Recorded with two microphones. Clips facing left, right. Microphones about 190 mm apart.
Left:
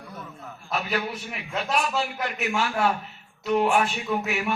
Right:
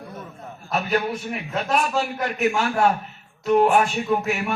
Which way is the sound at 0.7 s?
45° right (ahead or behind).